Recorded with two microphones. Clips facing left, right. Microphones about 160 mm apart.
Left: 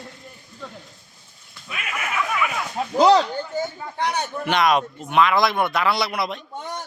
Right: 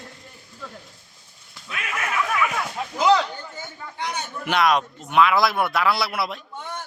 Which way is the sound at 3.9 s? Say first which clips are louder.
Left 5 dB; 60° left (ahead or behind).